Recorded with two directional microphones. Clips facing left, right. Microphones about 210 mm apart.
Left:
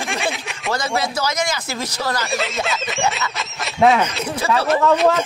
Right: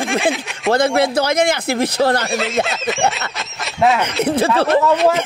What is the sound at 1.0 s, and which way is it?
Speech, 60° right (ahead or behind).